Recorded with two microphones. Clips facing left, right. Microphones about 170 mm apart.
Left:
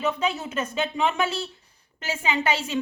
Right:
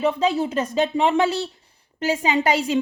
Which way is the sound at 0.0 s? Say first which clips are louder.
Right 6 dB; 35° right (ahead or behind).